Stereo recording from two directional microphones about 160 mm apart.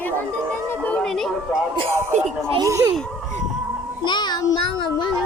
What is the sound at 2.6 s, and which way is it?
Speech, 20° right (ahead or behind).